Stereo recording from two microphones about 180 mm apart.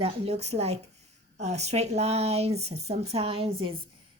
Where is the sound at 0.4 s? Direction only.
35° right (ahead or behind).